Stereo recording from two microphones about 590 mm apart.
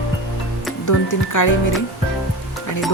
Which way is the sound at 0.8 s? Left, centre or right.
Left.